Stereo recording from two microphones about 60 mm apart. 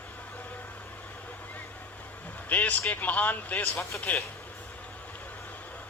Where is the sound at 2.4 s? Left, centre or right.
Left.